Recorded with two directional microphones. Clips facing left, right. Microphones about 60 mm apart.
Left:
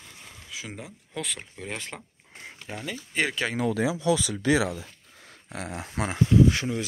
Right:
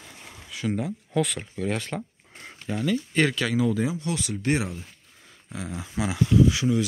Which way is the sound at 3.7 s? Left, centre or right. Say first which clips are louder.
Even; left.